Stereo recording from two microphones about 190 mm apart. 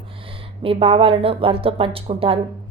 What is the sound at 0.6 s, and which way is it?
A woman's voice, 30° right (ahead or behind).